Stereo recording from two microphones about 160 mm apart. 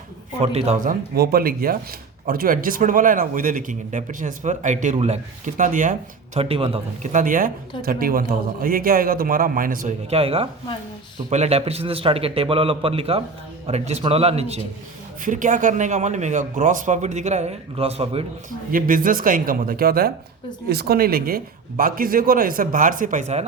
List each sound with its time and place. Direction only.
0.4 s a man's voice: 40° right (ahead or behind)
0.9 s a man's voice: 70° right (ahead or behind); by 6.4 s 55° right (ahead or behind)
6.4 s a man's voice: 35° right (ahead or behind)
7.0 s a man's voice: 55° right (ahead or behind)
10.1 s a man's voice: 40° right (ahead or behind)
15.2 s speech: 55° right (ahead or behind); by 18.3 s 40° right (ahead or behind)
18.7 s a man's voice: 60° right (ahead or behind)
20.7 s a man's voice: 80° right; by 23.5 s 45° right (ahead or behind)